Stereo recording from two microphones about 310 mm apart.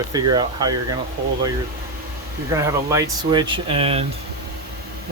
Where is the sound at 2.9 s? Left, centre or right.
Centre.